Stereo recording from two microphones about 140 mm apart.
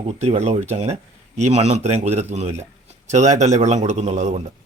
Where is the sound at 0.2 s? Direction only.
50° right (ahead or behind).